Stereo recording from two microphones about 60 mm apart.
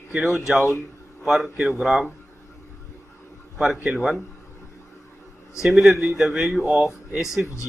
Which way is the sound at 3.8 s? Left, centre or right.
Centre.